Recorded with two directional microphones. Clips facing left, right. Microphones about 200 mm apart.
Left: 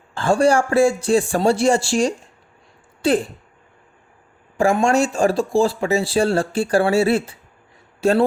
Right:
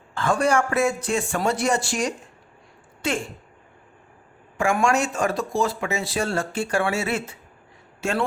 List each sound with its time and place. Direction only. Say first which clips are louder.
0.1 s speech: left 5 dB; 30° left (ahead or behind)
4.5 s speech: left 5 dB; 30° left (ahead or behind)